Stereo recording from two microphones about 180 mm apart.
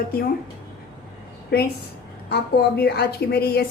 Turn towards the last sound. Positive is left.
turn(degrees=60)  # may be behind; listen again after turning